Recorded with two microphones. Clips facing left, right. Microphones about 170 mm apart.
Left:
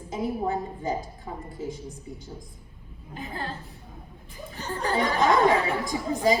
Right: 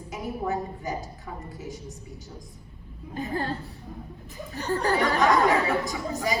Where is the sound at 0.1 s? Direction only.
30° left (ahead or behind).